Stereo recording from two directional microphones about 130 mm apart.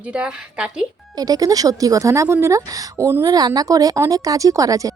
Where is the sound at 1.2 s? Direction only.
30° right (ahead or behind).